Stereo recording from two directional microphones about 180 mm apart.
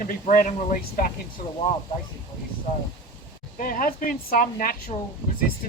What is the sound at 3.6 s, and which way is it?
Speech, 50° left (ahead or behind).